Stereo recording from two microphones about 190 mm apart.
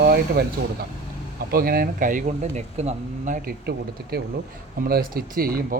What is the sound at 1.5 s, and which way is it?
Speech, 50° right (ahead or behind).